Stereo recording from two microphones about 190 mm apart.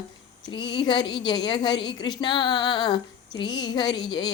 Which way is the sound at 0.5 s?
25° left (ahead or behind).